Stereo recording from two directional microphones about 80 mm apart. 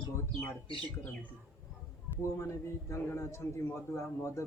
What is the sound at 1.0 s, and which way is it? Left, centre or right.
Speech, centre.